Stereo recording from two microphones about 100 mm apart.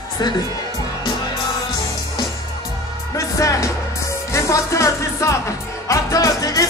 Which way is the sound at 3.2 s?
30° left (ahead or behind).